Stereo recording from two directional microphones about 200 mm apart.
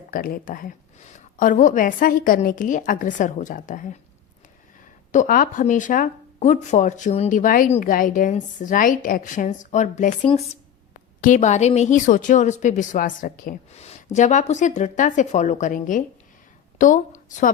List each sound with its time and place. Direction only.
0.1 s speech: 45° left (ahead or behind)
5.1 s a woman's voice: 40° left (ahead or behind)